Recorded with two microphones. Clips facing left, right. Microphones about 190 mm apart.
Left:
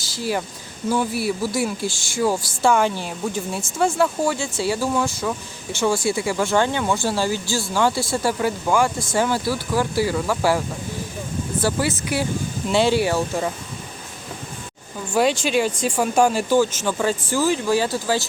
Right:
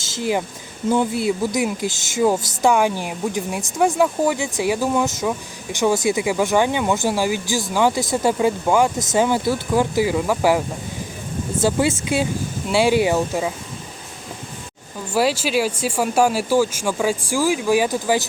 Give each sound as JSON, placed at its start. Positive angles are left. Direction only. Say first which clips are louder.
{"t": 0.2, "sound": "speech", "louder": "right 3 dB", "side_deg": -20}
{"t": 11.6, "sound": "speech", "louder": "right 4 dB", "side_deg": -20}
{"t": 12.6, "sound": "speech", "louder": "right 2 dB", "side_deg": -10}
{"t": 15.1, "sound": "speech", "louder": "even", "side_deg": -5}